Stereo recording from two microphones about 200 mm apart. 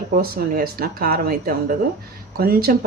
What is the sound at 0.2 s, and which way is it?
Speech, 50° right (ahead or behind).